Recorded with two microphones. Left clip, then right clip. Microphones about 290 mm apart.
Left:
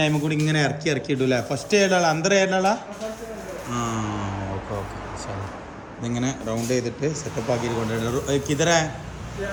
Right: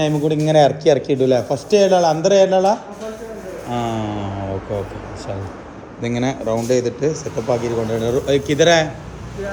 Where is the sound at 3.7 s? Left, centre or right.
Centre.